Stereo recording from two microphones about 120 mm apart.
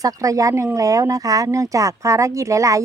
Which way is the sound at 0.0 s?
30° right (ahead or behind).